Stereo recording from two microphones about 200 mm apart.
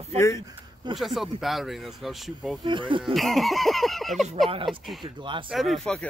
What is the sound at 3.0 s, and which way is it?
Speech, centre (ahead or behind).